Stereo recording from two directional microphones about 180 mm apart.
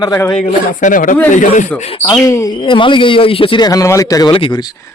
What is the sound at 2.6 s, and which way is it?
Speech, 30° left (ahead or behind).